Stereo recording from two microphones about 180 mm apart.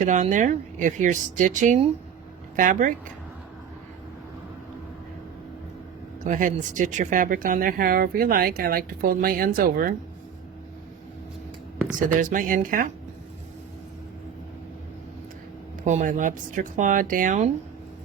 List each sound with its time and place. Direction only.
0.0 s speech: 45° right (ahead or behind)
6.2 s speech: 45° right (ahead or behind)
11.9 s speech: 45° right (ahead or behind)
15.8 s speech: 40° right (ahead or behind)